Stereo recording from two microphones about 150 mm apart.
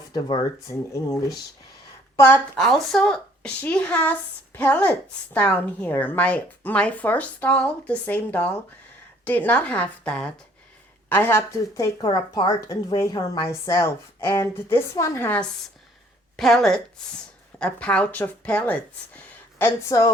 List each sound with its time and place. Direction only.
0.1 s a woman's voice: 30° left (ahead or behind)
2.6 s a woman's voice: centre (ahead or behind)
16.4 s a woman's voice: centre (ahead or behind); by 20.1 s 20° left (ahead or behind)